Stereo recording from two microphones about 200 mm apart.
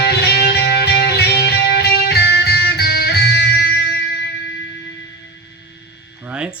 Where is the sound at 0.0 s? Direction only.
55° left (ahead or behind).